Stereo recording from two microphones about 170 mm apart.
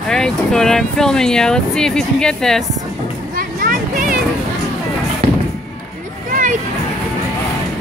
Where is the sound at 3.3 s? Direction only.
55° right (ahead or behind).